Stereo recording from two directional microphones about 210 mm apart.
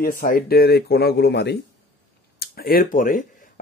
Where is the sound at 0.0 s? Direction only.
40° left (ahead or behind).